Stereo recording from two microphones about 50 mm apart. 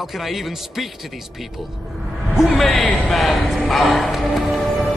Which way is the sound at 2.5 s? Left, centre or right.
Centre.